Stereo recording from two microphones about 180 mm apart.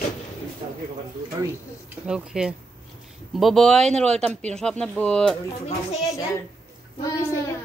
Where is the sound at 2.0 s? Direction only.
5° right (ahead or behind).